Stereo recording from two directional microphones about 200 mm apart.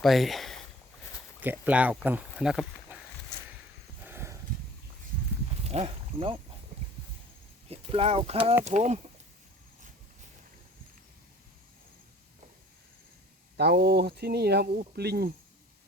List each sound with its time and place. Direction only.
0.0 s speech: centre (ahead or behind)
4.0 s a sound: 10° right (ahead or behind)
5.6 s speech: 30° right (ahead or behind)
7.7 s speech: 30° right (ahead or behind)
13.6 s speech: 55° right (ahead or behind)